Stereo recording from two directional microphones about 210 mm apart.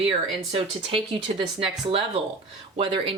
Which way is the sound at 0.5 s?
25° right (ahead or behind).